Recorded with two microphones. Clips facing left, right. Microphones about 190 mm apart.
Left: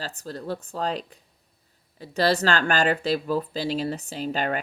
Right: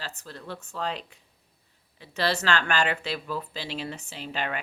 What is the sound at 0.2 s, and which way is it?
Speech, 40° left (ahead or behind).